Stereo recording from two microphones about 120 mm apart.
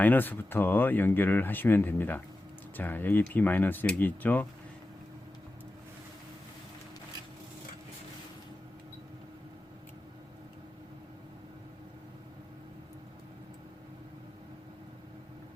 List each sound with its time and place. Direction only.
0.0 s speech: 15° left (ahead or behind)